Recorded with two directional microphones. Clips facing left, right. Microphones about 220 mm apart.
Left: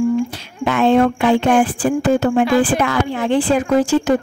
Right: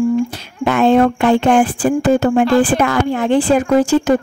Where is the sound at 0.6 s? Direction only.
45° right (ahead or behind).